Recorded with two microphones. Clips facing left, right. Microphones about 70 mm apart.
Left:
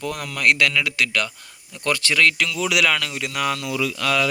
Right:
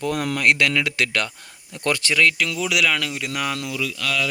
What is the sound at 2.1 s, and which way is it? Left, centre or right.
Speech, centre.